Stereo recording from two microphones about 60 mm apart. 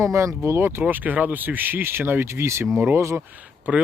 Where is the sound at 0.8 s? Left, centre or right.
Right.